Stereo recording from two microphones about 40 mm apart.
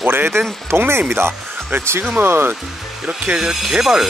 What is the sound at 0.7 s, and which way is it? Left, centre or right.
Speech, right.